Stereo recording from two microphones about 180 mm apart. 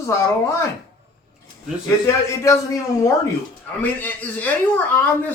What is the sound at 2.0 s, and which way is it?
Speech, 15° left (ahead or behind).